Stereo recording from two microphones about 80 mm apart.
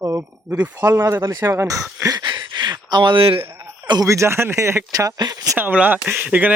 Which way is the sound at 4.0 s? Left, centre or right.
Right.